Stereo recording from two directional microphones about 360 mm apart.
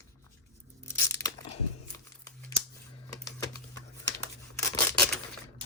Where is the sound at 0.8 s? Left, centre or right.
Centre.